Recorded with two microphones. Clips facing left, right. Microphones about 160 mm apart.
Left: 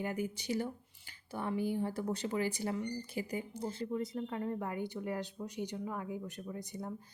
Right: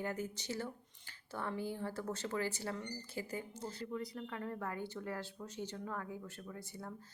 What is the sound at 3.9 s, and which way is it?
Speech, 25° left (ahead or behind).